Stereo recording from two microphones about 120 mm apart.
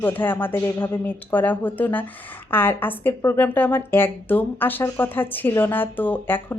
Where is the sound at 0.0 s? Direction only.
15° left (ahead or behind).